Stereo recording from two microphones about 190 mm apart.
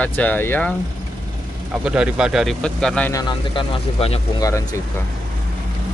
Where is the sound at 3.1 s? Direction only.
20° left (ahead or behind).